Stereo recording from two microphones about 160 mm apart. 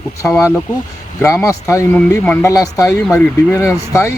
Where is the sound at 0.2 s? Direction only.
10° left (ahead or behind).